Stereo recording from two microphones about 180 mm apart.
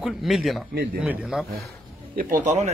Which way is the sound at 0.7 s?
60° right (ahead or behind).